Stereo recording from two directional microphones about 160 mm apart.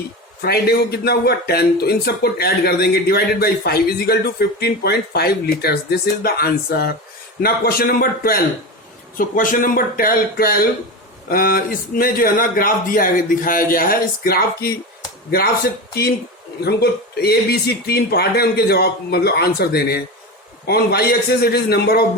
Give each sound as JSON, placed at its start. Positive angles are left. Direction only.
{"t": 0.4, "sound": "a man's voice", "side_deg": 80}
{"t": 16.6, "sound": "a man's voice", "side_deg": 85}